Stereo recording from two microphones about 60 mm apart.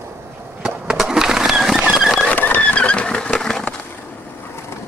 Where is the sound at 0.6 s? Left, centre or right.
Centre.